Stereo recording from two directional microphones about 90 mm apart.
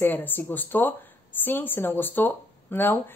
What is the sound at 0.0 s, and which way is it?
Speech, 20° left (ahead or behind).